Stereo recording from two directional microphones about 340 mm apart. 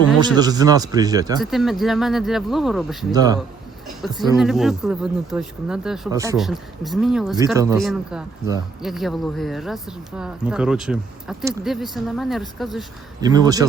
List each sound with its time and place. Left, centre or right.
0.2 s speech: centre
3.1 s speech: centre
4.0 s speech: centre
13.2 s speech: centre